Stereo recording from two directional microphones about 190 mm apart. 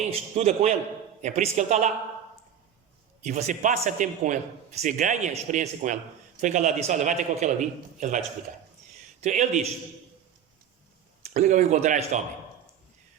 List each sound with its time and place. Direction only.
0.1 s a man's voice: 35° right (ahead or behind)
3.2 s a man's voice: 40° right (ahead or behind)
9.2 s a man's voice: 40° right (ahead or behind)
11.2 s a man's voice: 35° right (ahead or behind)